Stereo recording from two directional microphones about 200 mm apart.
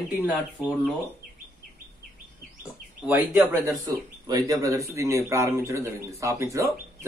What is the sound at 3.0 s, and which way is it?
Speech, 10° right (ahead or behind).